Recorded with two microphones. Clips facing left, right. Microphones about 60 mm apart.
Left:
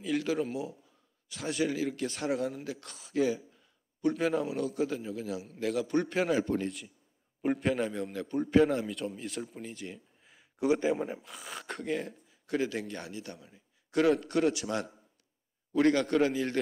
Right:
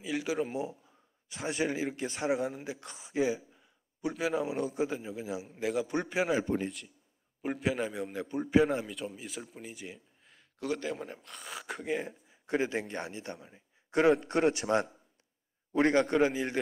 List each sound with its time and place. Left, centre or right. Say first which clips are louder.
0.0 s speech: left 2 dB; centre
0.5 s speech: right 1 dB; right; by 4.5 s centre
4.6 s speech: left 1 dB; centre
7.4 s speech: left 3 dB; centre
10.6 s speech: left 7 dB; centre; by 13.4 s right
13.5 s a sound: right 2 dB; right
14.4 s a man's voice: right 2 dB; right